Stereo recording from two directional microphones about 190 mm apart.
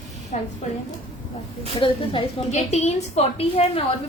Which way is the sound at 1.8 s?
30° left (ahead or behind).